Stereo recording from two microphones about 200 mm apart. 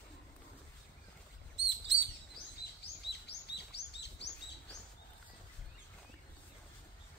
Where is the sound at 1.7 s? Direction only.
60° right (ahead or behind).